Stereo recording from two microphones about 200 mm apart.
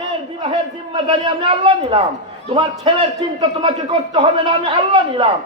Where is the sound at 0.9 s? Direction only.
25° right (ahead or behind).